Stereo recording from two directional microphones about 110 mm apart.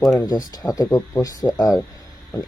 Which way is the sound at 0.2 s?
35° left (ahead or behind).